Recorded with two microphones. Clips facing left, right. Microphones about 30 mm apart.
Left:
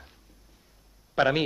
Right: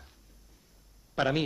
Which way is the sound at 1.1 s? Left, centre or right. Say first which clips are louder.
Left 5 dB; left.